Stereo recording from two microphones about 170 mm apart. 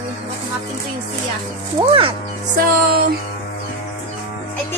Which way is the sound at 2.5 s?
60° right (ahead or behind).